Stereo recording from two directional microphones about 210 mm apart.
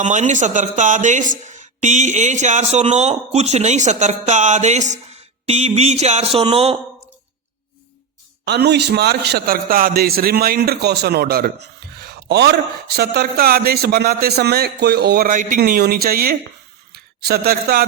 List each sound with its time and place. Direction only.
0.0 s a man's voice: 35° right (ahead or behind)
8.4 s a man's voice: 55° right (ahead or behind)